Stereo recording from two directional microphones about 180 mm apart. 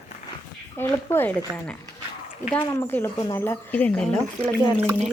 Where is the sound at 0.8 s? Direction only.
10° left (ahead or behind).